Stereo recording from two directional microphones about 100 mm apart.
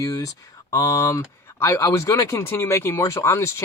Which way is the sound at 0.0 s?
35° left (ahead or behind).